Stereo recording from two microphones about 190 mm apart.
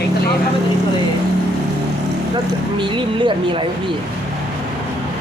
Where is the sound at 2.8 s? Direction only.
25° right (ahead or behind).